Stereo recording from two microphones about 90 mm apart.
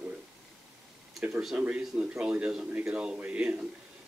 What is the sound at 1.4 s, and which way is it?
Speech, 10° right (ahead or behind).